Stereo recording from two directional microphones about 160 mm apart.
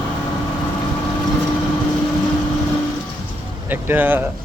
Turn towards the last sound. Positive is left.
turn(degrees=-10)  # may be behind; listen again after turning